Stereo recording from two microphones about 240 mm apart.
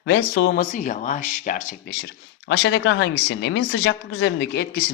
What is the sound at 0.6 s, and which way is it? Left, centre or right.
Speech, left.